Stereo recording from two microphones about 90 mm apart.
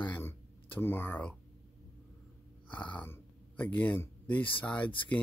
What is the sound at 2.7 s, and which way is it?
Speech, 15° left (ahead or behind).